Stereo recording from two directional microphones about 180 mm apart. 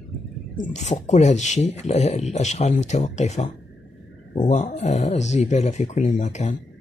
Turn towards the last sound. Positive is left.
turn(degrees=40)  # may be behind; listen again after turning